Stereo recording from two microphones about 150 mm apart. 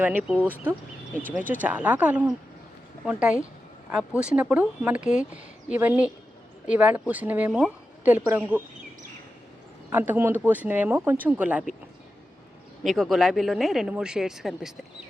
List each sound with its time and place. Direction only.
0.0 s speech: 10° right (ahead or behind)
1.6 s speech: 10° right (ahead or behind)
9.9 s speech: 10° right (ahead or behind)
12.8 s speech: centre (ahead or behind)